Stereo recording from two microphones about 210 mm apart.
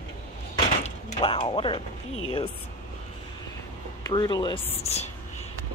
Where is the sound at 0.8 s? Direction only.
30° left (ahead or behind).